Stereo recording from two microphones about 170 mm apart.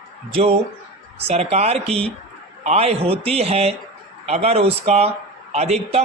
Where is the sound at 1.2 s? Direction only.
40° right (ahead or behind).